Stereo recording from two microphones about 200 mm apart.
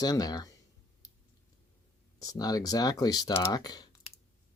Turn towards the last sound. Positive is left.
turn(degrees=20)  # may be behind; listen again after turning